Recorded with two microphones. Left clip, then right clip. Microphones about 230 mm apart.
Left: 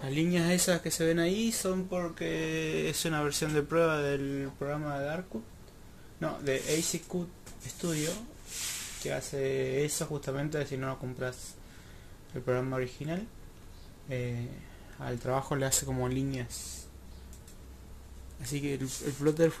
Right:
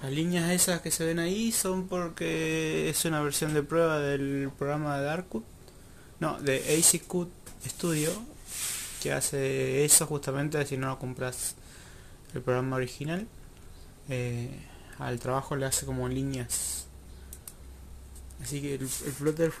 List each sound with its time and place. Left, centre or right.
0.0 s speech: centre
1.9 s speech: centre
12.4 s speech: centre
15.3 s speech: centre
18.4 s speech: centre